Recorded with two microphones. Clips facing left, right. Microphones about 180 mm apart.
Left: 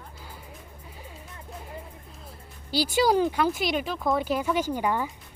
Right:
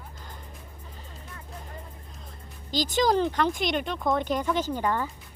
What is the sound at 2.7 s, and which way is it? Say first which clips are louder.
Speech: left 1 dB; 10° left (ahead or behind).